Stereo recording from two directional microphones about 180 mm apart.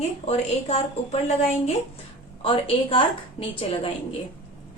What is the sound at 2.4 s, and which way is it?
A woman's voice, 30° left (ahead or behind).